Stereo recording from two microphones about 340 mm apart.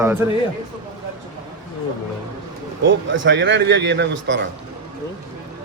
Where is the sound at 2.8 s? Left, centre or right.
Right.